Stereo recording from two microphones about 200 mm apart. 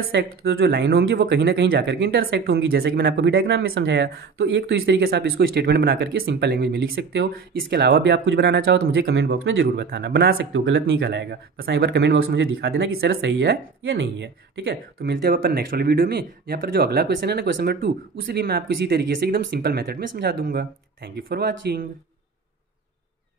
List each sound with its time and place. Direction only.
0.2 s speech: 55° right (ahead or behind)
5.0 s speech: 50° right (ahead or behind); by 8.8 s 70° right (ahead or behind)
8.8 s speech: 50° right (ahead or behind); by 11.0 s 70° right (ahead or behind)
11.0 s speech: 55° right (ahead or behind); by 12.5 s 80° right
12.5 s speech: 55° right (ahead or behind)
13.2 s speech: 65° right (ahead or behind)